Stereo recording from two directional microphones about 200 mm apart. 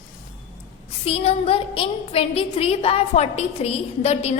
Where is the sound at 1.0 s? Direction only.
30° left (ahead or behind).